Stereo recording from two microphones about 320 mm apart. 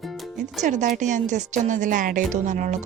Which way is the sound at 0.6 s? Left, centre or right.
Right.